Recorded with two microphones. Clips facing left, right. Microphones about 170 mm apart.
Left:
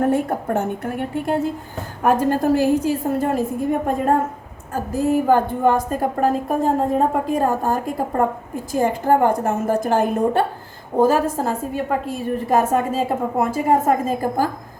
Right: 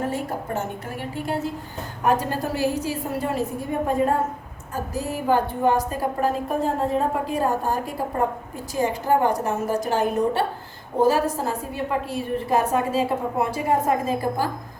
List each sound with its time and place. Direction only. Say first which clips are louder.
0.0 s a woman's voice: left 8 dB; 55° left (ahead or behind)